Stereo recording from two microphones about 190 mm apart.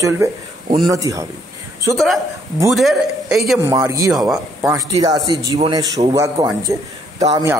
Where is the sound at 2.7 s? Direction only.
Centre (ahead or behind).